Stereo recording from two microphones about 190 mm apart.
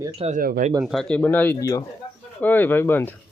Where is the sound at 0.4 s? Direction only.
50° right (ahead or behind).